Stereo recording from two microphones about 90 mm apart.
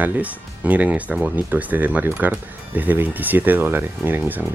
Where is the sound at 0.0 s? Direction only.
20° right (ahead or behind).